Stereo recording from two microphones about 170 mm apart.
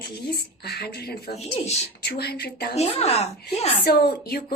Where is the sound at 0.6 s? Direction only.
70° left (ahead or behind).